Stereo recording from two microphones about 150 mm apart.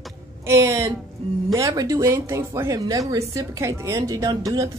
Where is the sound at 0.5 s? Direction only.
20° right (ahead or behind).